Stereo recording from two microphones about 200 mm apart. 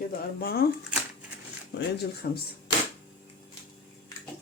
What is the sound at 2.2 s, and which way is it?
Speech, 50° left (ahead or behind).